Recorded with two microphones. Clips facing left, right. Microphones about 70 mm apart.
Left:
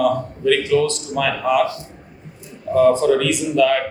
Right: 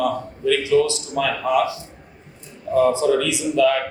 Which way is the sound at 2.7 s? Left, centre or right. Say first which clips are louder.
Left 3 dB; left.